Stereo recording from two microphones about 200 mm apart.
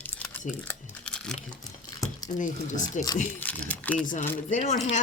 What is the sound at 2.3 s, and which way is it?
Speech, 40° left (ahead or behind).